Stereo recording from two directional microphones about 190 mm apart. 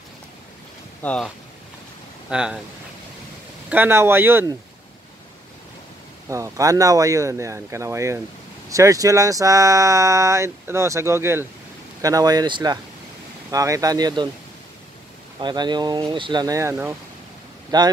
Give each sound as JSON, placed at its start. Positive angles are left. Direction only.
{"t": 1.0, "sound": "speech", "side_deg": 5}
{"t": 3.7, "sound": "speech", "side_deg": -10}
{"t": 6.2, "sound": "speech", "side_deg": -15}
{"t": 15.4, "sound": "speech", "side_deg": -20}